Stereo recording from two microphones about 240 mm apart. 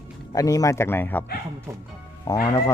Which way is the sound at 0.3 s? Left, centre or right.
Centre.